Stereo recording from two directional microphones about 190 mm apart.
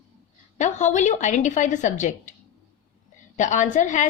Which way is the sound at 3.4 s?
40° left (ahead or behind).